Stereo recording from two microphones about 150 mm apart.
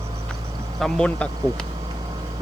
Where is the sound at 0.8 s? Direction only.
5° left (ahead or behind).